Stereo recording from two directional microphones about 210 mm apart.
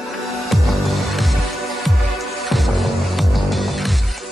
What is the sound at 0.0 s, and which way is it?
Music, centre (ahead or behind).